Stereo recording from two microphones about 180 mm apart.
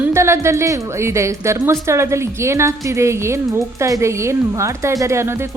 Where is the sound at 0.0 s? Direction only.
15° right (ahead or behind).